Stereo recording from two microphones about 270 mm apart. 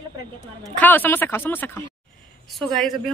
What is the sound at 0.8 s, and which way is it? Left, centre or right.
A woman's voice, centre.